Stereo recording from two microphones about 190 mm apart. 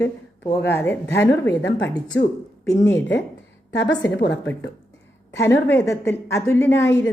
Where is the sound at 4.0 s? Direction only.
70° left (ahead or behind).